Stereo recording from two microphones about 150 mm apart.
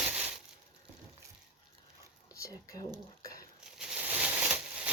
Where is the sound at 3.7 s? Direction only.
5° right (ahead or behind).